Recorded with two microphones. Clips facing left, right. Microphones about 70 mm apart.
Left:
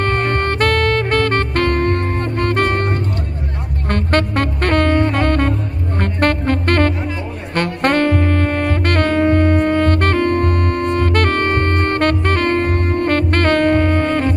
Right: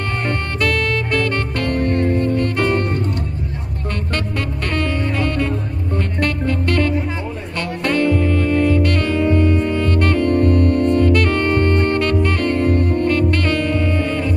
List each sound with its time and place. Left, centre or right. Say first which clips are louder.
0.0 s saxophone: left 5 dB; left
3.9 s music: left 8 dB; left
7.5 s saxophone: left 4 dB; left